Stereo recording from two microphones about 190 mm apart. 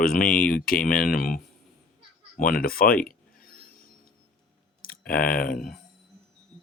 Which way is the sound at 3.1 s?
50° left (ahead or behind).